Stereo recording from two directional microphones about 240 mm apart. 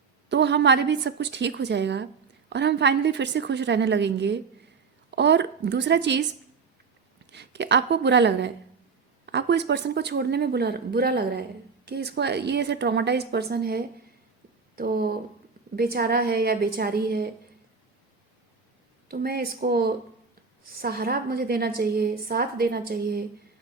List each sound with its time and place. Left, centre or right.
0.3 s speech: right
7.3 s a woman's voice: right
19.0 s a woman's voice: right